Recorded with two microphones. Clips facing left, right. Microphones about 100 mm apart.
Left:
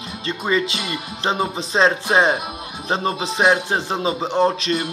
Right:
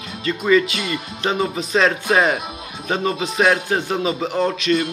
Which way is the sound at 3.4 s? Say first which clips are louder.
Even; 20° left (ahead or behind).